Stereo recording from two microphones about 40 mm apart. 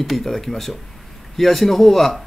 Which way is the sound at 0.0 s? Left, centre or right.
Centre.